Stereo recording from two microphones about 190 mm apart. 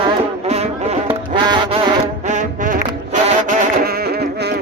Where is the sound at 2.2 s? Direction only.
40° right (ahead or behind); by 4.5 s 60° right (ahead or behind).